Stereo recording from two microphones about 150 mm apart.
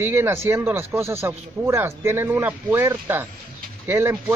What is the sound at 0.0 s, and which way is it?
Speech, 15° right (ahead or behind).